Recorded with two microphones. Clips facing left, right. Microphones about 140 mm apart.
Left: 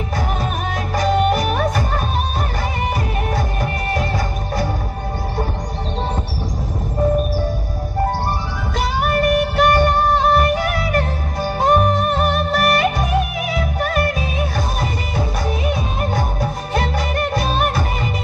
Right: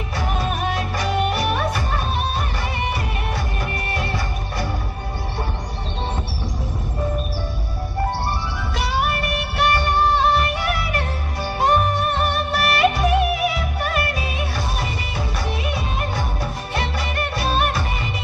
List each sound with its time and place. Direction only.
0.9 s music: 45° left (ahead or behind)
3.9 s music: 45° left (ahead or behind)
8.7 s music: 45° left (ahead or behind)
16.7 s music: 45° left (ahead or behind)